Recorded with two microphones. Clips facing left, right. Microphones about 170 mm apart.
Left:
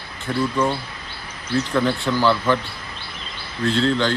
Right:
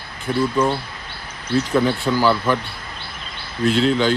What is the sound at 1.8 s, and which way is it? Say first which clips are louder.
Speech: right 1 dB; 5° right (ahead or behind).